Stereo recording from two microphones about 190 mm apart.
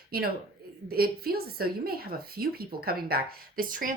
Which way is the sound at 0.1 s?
55° right (ahead or behind).